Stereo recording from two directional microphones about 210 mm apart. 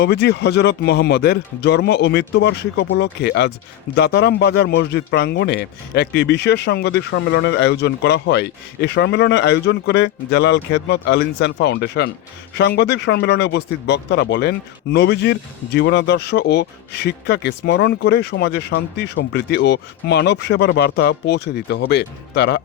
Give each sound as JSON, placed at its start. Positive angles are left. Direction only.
{"t": 0.0, "sound": "speech", "side_deg": 50}